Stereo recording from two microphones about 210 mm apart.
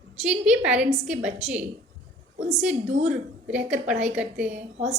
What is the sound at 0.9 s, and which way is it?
Speech, 5° right (ahead or behind).